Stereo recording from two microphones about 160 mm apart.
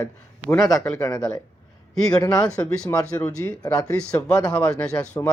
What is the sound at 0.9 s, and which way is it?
Speech, 25° left (ahead or behind).